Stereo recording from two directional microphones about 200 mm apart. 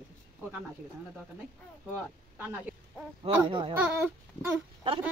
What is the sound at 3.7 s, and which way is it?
Speech, 5° right (ahead or behind).